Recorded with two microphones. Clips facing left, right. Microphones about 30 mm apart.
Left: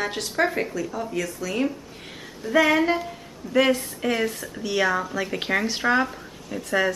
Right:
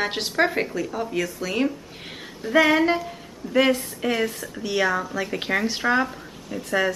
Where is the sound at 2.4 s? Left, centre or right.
Centre.